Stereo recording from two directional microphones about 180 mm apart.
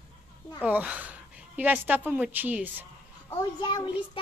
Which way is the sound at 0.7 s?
10° right (ahead or behind).